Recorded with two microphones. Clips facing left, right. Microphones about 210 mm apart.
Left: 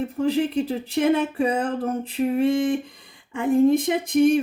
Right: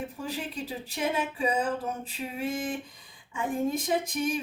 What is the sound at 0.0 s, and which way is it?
Speech, 60° left (ahead or behind).